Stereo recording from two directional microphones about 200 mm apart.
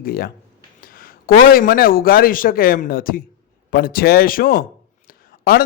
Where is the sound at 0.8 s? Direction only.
45° left (ahead or behind).